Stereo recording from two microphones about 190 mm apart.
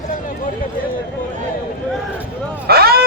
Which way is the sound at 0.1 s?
45° left (ahead or behind).